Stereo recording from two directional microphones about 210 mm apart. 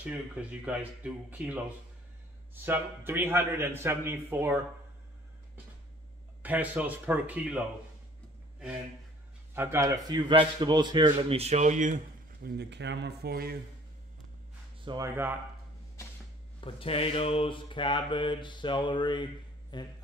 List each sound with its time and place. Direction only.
0.0 s a man's voice: 5° right (ahead or behind)
2.6 s a man's voice: 10° right (ahead or behind)
6.4 s a man's voice: 5° right (ahead or behind)
9.5 s a man's voice: 10° right (ahead or behind); by 12.0 s 35° right (ahead or behind)
12.4 s speech: 55° right (ahead or behind)
14.8 s a sound: 20° right (ahead or behind)
16.6 s mantra: 25° left (ahead or behind)